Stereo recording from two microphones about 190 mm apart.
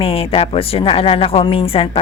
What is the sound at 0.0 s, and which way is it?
Speech, 30° left (ahead or behind).